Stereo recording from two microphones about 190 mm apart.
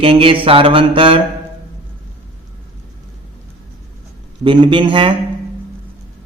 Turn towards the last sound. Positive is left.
turn(degrees=-25)  # may be behind; listen again after turning